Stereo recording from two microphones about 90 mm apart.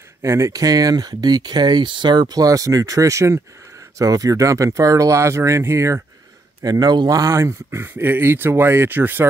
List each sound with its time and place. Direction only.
0.2 s speech: 35° right (ahead or behind)
6.6 s speech: 45° right (ahead or behind); by 9.2 s 20° right (ahead or behind)